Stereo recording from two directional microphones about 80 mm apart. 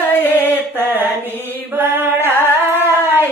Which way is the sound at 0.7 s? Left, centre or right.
Right.